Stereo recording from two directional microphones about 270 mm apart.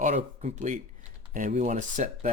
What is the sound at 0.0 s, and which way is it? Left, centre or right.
Speech, right.